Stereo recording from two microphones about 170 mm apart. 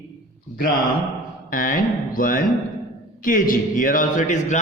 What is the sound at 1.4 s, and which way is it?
A man's voice, 55° left (ahead or behind).